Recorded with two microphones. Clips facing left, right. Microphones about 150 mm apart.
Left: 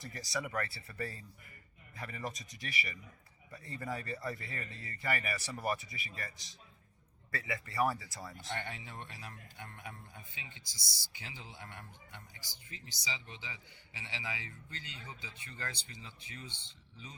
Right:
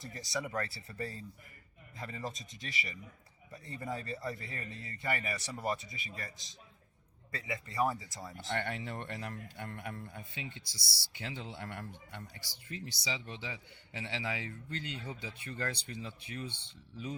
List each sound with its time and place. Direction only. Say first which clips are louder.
0.0 s speech: right 1 dB; 25° right (ahead or behind)
8.4 s a man's voice: right 7 dB; 65° right (ahead or behind)